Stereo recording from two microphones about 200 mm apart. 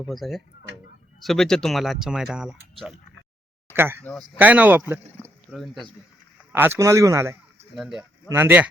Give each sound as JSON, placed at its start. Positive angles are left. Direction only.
{"t": 0.1, "sound": "speech", "side_deg": 0}
{"t": 4.0, "sound": "speech", "side_deg": 5}
{"t": 4.4, "sound": "a man's voice", "side_deg": -10}
{"t": 6.5, "sound": "a man's voice", "side_deg": -10}
{"t": 7.8, "sound": "a man's voice", "side_deg": -5}